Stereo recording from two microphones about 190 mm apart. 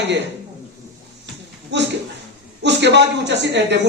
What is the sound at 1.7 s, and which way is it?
A man's voice, 65° right (ahead or behind).